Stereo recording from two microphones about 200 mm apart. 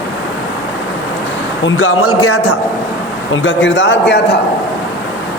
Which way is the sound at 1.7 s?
90° left.